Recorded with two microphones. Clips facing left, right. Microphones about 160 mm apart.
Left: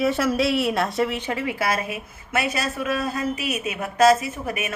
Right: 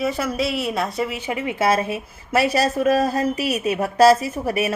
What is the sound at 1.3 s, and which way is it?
A woman's voice, 20° right (ahead or behind).